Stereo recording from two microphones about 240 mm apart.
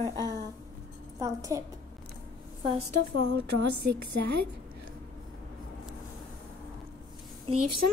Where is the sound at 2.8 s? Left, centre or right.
Right.